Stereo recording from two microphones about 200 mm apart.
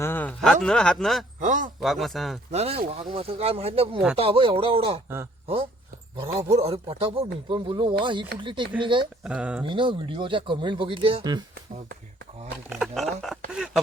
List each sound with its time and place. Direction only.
0.0 s speech: 10° left (ahead or behind)
1.4 s a man's voice: 40° right (ahead or behind)
1.8 s speech: centre (ahead or behind)
2.5 s a man's voice: 30° right (ahead or behind)
5.0 s speech: 10° right (ahead or behind)
6.1 s speech: 30° right (ahead or behind)
9.2 s speech: 5° right (ahead or behind)
9.6 s speech: 25° right (ahead or behind)
12.7 s speech: centre (ahead or behind)